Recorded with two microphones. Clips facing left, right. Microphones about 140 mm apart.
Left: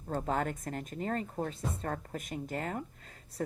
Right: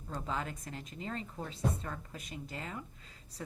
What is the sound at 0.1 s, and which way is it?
Speech, 50° left (ahead or behind).